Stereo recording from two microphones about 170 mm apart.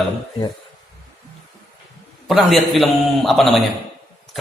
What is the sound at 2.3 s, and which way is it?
A man's voice, centre (ahead or behind).